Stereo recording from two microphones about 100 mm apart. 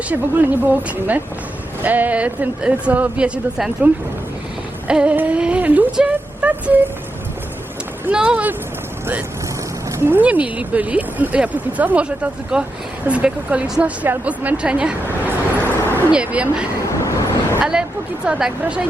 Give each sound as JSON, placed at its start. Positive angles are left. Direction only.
{"t": 0.1, "sound": "speech", "side_deg": -15}
{"t": 8.1, "sound": "speech", "side_deg": -10}
{"t": 10.0, "sound": "speech", "side_deg": -20}
{"t": 15.0, "sound": "a sound", "side_deg": -20}
{"t": 16.1, "sound": "speech", "side_deg": -15}
{"t": 16.9, "sound": "vehicle", "side_deg": 30}
{"t": 17.6, "sound": "a woman's voice", "side_deg": -5}